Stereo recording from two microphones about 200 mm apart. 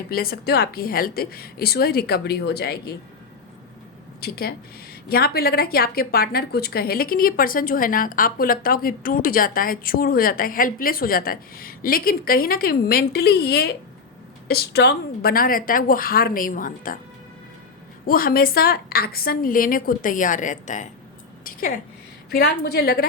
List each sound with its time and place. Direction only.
0.1 s a woman's voice: 50° left (ahead or behind)
4.2 s a woman's voice: 50° left (ahead or behind)
18.0 s a woman's voice: 45° left (ahead or behind)
22.3 s a woman's voice: 50° left (ahead or behind)